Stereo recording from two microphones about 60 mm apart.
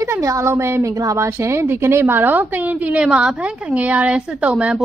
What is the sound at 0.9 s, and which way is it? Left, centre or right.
A woman's voice, right.